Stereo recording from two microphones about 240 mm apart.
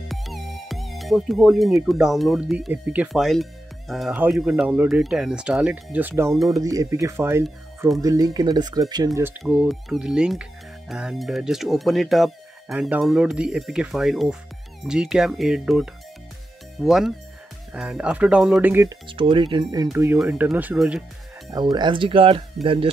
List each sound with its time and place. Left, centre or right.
0.1 s speech: centre
9.4 s speech: centre
21.5 s speech: centre